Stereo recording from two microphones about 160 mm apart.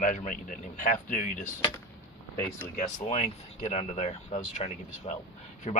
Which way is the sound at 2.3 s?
15° left (ahead or behind).